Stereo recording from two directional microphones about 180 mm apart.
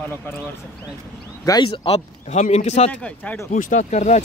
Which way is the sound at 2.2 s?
40° left (ahead or behind).